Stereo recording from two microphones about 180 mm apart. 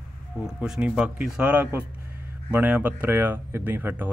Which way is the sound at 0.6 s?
10° right (ahead or behind).